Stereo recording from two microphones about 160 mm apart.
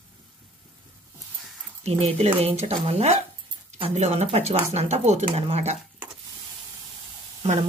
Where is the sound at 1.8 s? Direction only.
40° right (ahead or behind).